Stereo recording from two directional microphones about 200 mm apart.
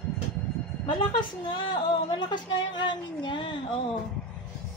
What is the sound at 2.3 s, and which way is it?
Speech, 25° left (ahead or behind).